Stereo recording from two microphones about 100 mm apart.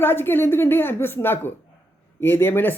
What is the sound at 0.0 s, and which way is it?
Speech, 20° left (ahead or behind).